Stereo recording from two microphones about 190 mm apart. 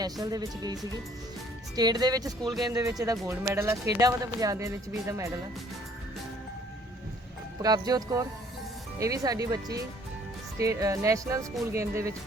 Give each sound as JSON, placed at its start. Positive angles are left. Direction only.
{"t": 0.0, "sound": "speech", "side_deg": -20}
{"t": 7.6, "sound": "speech", "side_deg": -20}